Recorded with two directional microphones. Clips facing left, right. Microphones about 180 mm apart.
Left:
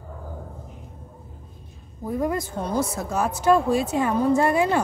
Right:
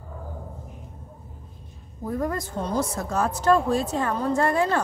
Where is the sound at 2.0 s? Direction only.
10° left (ahead or behind).